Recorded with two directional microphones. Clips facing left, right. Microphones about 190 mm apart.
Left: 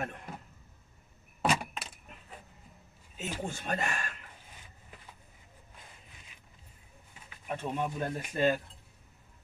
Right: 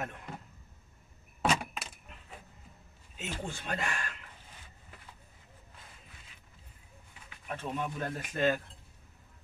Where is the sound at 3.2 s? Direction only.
45° left (ahead or behind).